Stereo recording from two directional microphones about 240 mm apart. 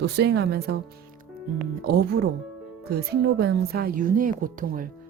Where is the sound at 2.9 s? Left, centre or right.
Right.